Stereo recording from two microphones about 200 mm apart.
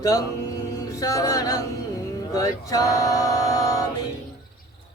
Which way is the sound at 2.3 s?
15° left (ahead or behind).